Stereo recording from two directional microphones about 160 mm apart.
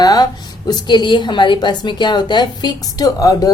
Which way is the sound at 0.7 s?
30° left (ahead or behind).